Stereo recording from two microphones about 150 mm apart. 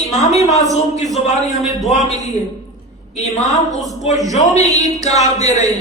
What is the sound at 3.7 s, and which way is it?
Speech, centre (ahead or behind).